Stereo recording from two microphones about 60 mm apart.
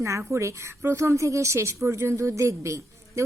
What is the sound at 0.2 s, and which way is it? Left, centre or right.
A woman's voice, right.